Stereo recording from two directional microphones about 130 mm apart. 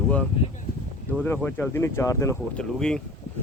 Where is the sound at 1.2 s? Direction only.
15° left (ahead or behind).